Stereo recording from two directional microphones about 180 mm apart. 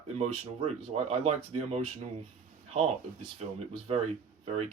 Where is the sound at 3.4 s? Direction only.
35° right (ahead or behind).